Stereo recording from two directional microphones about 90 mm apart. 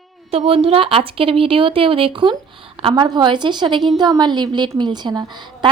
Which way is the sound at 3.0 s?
55° right (ahead or behind).